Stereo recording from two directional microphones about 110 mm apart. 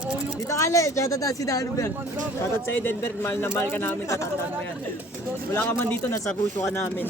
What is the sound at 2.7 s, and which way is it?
Speech, 20° left (ahead or behind).